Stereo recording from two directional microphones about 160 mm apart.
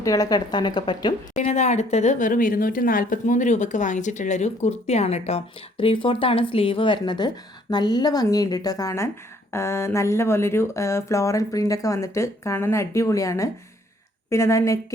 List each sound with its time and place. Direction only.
0.0 s speech: 20° left (ahead or behind)
1.4 s speech: 45° left (ahead or behind); by 14.9 s 20° left (ahead or behind)